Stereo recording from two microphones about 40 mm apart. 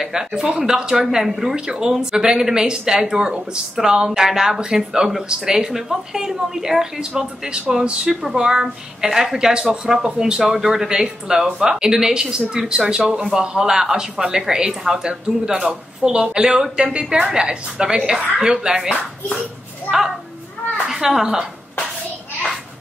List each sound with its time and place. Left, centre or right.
0.0 s speech: centre
4.2 s a woman's voice: centre
20.8 s a woman's voice: centre